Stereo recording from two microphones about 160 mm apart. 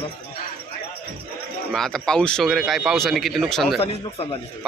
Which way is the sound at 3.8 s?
40° left (ahead or behind).